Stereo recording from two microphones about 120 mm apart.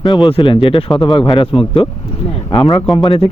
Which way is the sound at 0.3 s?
45° left (ahead or behind).